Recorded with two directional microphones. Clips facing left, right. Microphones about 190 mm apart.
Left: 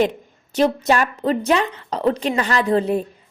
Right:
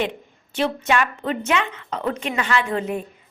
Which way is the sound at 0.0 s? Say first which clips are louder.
Left 6 dB; 40° left (ahead or behind).